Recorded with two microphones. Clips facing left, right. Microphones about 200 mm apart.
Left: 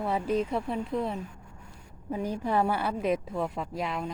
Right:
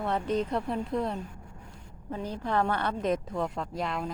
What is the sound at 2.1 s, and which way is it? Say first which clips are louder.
A woman's voice: left 2 dB; 10° left (ahead or behind).